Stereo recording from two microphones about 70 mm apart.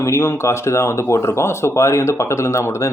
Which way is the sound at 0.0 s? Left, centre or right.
Left.